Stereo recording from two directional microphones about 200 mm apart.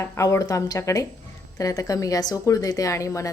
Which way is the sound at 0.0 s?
15° left (ahead or behind).